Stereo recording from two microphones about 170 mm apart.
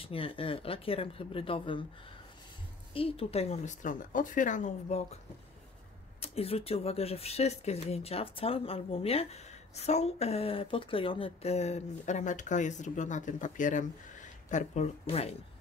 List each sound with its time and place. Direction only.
0.0 s speech: 30° left (ahead or behind)
2.9 s speech: 35° left (ahead or behind)
6.2 s speech: 35° left (ahead or behind)